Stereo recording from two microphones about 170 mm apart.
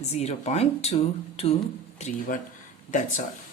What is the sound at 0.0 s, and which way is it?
A woman's voice, 40° left (ahead or behind).